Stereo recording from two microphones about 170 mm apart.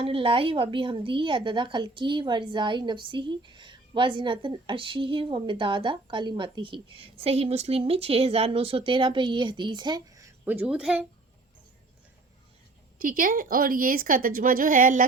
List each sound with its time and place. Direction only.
0.0 s a woman's voice: 30° right (ahead or behind); by 11.0 s 5° right (ahead or behind)
13.0 s a woman's voice: 55° right (ahead or behind)